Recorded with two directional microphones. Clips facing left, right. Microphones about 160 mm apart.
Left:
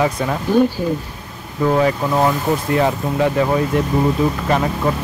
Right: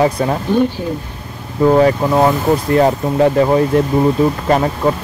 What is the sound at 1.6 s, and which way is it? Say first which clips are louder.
Speech: right 5 dB; 30° right (ahead or behind).